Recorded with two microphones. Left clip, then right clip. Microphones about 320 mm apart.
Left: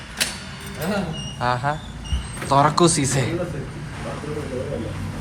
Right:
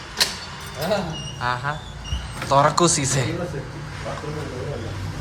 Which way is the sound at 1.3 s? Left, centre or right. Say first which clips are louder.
Left 3 dB; centre.